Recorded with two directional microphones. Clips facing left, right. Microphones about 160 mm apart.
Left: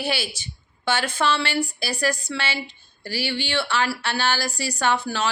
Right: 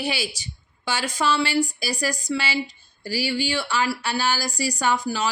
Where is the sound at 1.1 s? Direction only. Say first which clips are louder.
Right 1 dB; 10° right (ahead or behind).